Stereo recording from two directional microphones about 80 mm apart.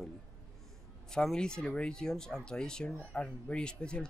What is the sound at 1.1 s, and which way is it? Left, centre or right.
Speech, centre.